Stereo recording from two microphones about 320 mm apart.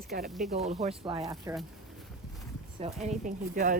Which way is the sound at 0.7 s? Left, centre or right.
Centre.